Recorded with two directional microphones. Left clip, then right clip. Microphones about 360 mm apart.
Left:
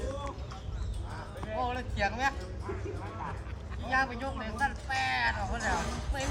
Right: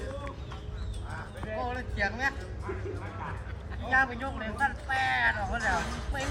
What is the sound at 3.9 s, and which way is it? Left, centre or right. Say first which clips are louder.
Speech: right 3 dB; centre.